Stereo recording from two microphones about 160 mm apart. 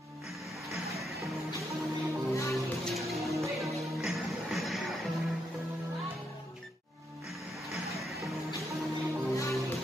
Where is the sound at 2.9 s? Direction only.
Centre (ahead or behind).